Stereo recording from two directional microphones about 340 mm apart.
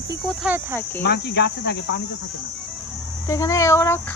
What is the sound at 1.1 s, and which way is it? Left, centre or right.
Cricket, left.